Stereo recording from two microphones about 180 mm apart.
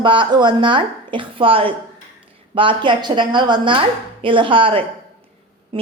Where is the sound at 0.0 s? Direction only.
25° right (ahead or behind).